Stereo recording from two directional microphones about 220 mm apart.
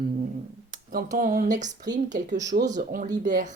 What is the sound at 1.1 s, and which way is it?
Speech, 40° right (ahead or behind).